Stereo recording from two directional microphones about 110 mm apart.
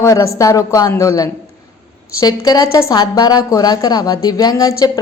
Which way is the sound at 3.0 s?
40° left (ahead or behind).